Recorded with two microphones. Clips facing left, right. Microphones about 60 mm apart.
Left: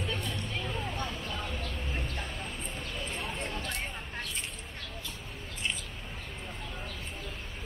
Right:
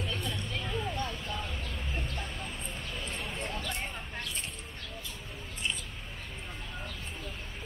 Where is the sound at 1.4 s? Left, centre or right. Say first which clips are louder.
Left 2 dB; left.